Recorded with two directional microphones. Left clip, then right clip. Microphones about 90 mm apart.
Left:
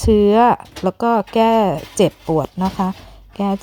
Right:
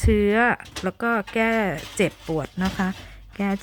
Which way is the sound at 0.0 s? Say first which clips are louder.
Left 7 dB; 35° left (ahead or behind).